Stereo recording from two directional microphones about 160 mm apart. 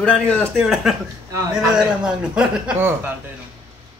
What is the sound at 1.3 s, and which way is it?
Speech, 20° right (ahead or behind).